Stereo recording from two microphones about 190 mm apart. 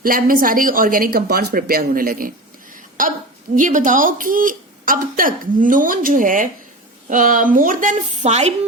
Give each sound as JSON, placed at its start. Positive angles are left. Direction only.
{"t": 0.0, "sound": "a woman's voice", "side_deg": -50}